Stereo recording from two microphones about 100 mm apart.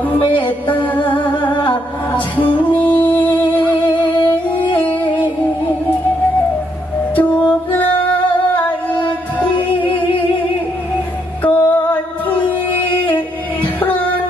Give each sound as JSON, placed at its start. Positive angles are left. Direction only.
{"t": 0.7, "sound": "humming", "side_deg": 15}
{"t": 2.1, "sound": "music", "side_deg": 15}
{"t": 7.2, "sound": "music", "side_deg": 15}
{"t": 9.5, "sound": "music", "side_deg": 60}
{"t": 11.4, "sound": "music", "side_deg": 15}
{"t": 13.7, "sound": "music", "side_deg": 15}